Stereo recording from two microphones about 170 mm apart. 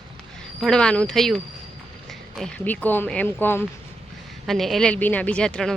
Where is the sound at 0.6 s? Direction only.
5° left (ahead or behind).